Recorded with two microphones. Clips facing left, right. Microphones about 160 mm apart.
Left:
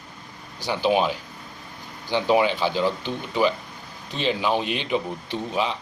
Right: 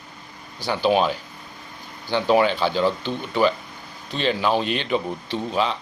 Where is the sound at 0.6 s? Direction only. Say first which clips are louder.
Right 2 dB; 15° left (ahead or behind).